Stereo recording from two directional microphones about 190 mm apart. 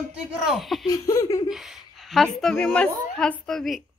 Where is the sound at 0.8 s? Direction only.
20° left (ahead or behind).